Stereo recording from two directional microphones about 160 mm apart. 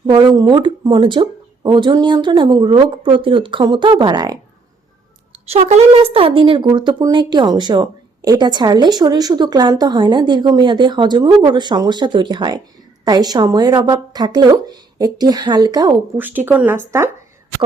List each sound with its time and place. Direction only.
0.0 s speech: 30° right (ahead or behind)
5.5 s speech: 45° right (ahead or behind); by 16.0 s 25° right (ahead or behind)
16.1 s speech: 10° right (ahead or behind)